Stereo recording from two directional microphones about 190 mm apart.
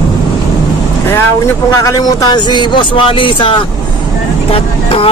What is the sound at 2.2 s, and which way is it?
Speech, 25° left (ahead or behind).